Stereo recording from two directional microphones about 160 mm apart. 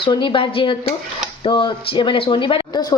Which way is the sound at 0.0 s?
30° left (ahead or behind).